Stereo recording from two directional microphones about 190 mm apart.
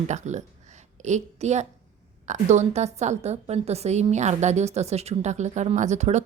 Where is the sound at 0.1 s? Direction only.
40° right (ahead or behind).